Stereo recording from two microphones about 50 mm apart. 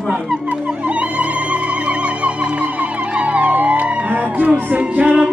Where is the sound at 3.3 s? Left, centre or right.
Right.